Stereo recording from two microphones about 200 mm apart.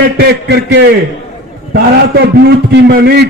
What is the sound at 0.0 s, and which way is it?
A man's voice, 55° right (ahead or behind).